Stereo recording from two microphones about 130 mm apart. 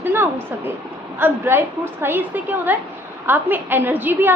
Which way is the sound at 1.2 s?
15° right (ahead or behind).